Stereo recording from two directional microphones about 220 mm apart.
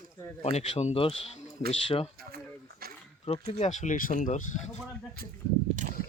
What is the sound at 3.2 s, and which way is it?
Speech, 30° left (ahead or behind).